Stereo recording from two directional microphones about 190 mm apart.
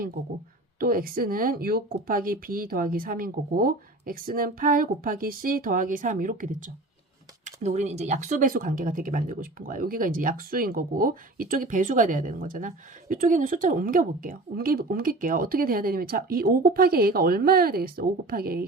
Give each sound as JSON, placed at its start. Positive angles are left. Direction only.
{"t": 0.8, "sound": "speech", "side_deg": -50}